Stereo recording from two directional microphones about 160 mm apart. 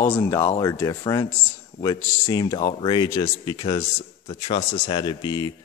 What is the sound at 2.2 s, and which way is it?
Speech, 20° left (ahead or behind).